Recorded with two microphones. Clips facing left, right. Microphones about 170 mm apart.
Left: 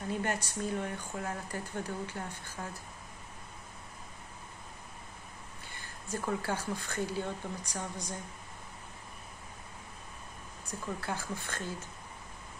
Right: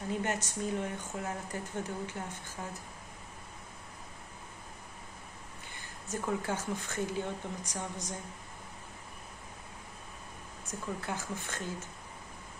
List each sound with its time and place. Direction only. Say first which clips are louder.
0.2 s speech: even; 20° right (ahead or behind)
6.0 s speech: even; 20° right (ahead or behind)
10.7 s speech: even; 20° right (ahead or behind)